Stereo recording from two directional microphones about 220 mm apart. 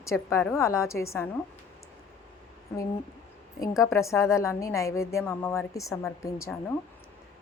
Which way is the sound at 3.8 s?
15° left (ahead or behind).